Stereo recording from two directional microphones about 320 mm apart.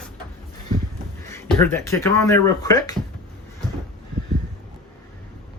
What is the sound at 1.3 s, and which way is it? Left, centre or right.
Speech, centre.